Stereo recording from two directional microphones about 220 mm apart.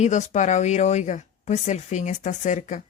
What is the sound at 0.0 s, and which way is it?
A woman's voice, 30° left (ahead or behind).